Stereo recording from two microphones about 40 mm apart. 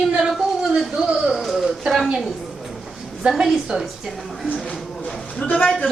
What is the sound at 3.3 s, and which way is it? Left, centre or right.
Speech, centre.